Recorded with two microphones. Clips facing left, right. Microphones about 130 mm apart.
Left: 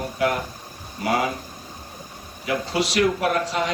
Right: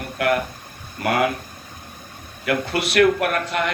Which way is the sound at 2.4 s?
60° right (ahead or behind).